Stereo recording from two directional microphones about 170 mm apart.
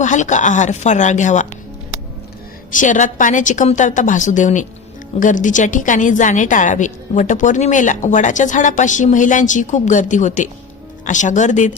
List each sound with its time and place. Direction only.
0.0 s a woman's voice: 45° left (ahead or behind)
2.7 s a woman's voice: 45° left (ahead or behind)